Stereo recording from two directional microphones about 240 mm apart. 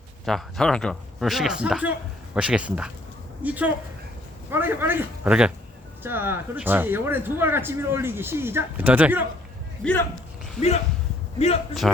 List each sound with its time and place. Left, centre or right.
0.3 s speech: centre
9.8 s speech: centre
11.3 s a man's voice: left